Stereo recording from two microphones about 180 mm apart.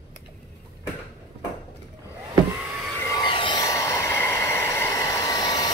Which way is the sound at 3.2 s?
30° left (ahead or behind).